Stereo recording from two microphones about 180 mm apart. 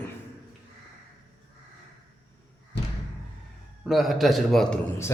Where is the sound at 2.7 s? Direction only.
70° left (ahead or behind).